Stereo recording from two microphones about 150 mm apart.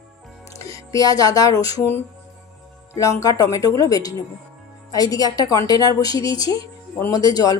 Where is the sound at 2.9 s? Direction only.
20° left (ahead or behind).